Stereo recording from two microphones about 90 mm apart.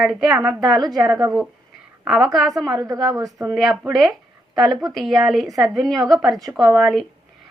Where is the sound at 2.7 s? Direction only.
40° right (ahead or behind).